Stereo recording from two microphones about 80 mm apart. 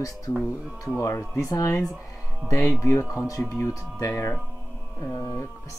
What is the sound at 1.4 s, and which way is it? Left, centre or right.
Speech, left.